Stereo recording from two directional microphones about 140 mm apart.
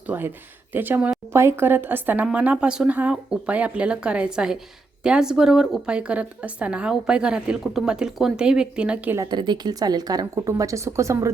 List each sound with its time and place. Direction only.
0.1 s a woman's voice: 15° right (ahead or behind)
9.1 s speech: 30° right (ahead or behind)